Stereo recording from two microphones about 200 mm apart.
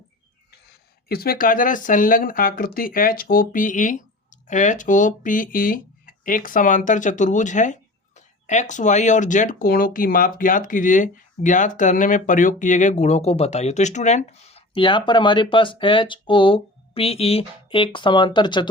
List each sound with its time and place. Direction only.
1.0 s speech: 50° left (ahead or behind); by 18.7 s 25° left (ahead or behind)